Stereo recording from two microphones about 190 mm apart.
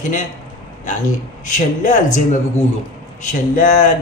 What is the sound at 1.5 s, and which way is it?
Speech, 40° left (ahead or behind).